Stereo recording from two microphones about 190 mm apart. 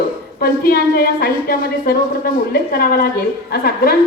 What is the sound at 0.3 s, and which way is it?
A woman's voice, 50° left (ahead or behind).